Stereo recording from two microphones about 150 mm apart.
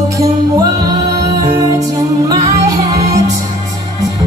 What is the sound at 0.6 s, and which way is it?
Music, 25° right (ahead or behind).